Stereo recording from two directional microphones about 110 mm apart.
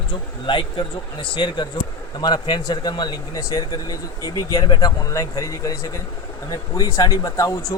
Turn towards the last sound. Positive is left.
turn(degrees=30)  # may be behind; listen again after turning